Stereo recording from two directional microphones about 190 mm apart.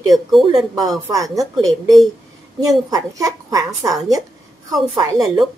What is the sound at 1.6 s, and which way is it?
Speech, centre (ahead or behind).